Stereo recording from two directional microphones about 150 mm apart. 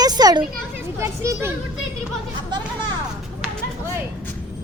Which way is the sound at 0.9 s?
20° right (ahead or behind).